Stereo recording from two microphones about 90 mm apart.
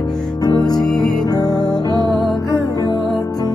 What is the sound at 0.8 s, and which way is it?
Music, 5° left (ahead or behind).